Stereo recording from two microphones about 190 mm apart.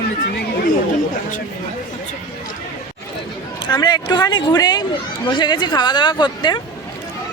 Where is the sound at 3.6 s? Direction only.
25° left (ahead or behind).